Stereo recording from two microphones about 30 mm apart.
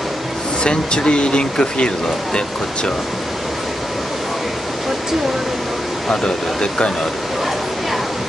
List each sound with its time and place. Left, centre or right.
0.7 s speech: left
6.0 s speech: left